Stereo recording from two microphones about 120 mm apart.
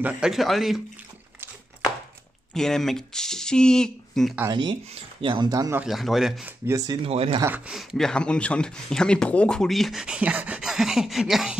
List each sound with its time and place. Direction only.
0.0 s speech: 5° right (ahead or behind)
2.5 s speech: 5° left (ahead or behind)
4.5 s speech: 40° right (ahead or behind)
5.9 s speech: centre (ahead or behind)
6.7 s speech: 25° right (ahead or behind)
7.0 s speech: 55° right (ahead or behind)
7.4 s speech: 10° right (ahead or behind)
8.1 s speech: 10° left (ahead or behind)